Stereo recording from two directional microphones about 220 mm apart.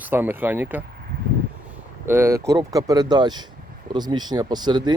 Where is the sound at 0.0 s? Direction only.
10° right (ahead or behind).